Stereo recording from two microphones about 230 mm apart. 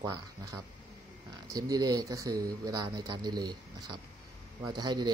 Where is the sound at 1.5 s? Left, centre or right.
Centre.